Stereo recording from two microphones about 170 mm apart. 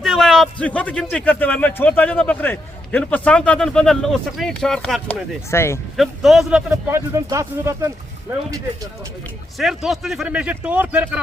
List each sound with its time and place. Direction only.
0.0 s a man's voice: centre (ahead or behind)
5.5 s a man's voice: 15° left (ahead or behind)
6.0 s a man's voice: centre (ahead or behind); by 7.9 s 15° right (ahead or behind)
9.6 s a man's voice: centre (ahead or behind)